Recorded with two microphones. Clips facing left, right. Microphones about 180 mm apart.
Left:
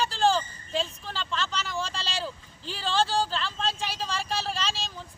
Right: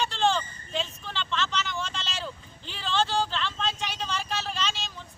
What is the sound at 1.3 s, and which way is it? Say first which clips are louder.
Speech: right 1 dB; 35° left (ahead or behind).